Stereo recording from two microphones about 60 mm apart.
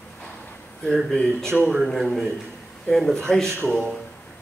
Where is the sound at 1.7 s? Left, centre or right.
Centre.